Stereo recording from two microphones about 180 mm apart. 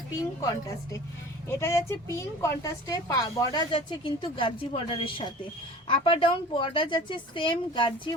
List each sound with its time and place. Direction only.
1.5 s a woman's voice: 15° left (ahead or behind)